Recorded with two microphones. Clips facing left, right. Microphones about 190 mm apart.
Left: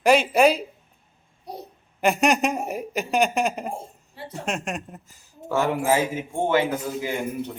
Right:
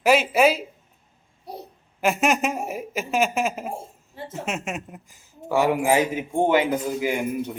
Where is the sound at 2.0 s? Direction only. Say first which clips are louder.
Left 1 dB; centre (ahead or behind).